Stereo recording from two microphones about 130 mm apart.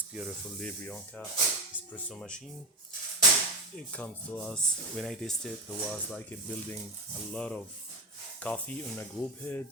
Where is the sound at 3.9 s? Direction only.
5° left (ahead or behind).